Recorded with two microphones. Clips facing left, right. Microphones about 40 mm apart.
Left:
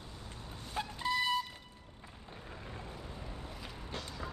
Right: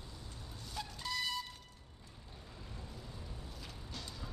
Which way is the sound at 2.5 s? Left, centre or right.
Left.